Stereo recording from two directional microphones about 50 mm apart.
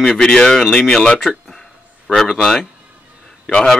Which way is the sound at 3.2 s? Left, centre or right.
Centre.